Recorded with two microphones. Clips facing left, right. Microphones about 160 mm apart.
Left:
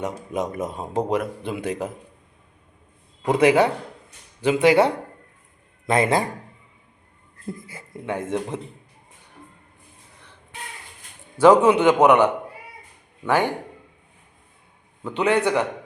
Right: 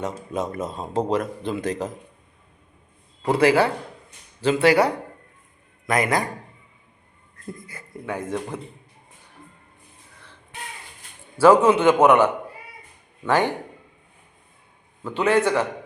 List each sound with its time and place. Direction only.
0.3 s a man's voice: 15° left (ahead or behind)
3.2 s a man's voice: 20° left (ahead or behind)
7.4 s speech: 25° left (ahead or behind)
11.6 s a man's voice: 15° left (ahead or behind)
15.0 s a man's voice: 15° left (ahead or behind)